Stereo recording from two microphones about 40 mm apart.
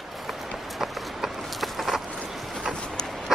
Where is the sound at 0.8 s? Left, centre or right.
Centre.